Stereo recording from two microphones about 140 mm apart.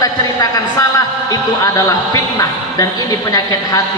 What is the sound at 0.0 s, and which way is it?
A woman's voice, 25° left (ahead or behind).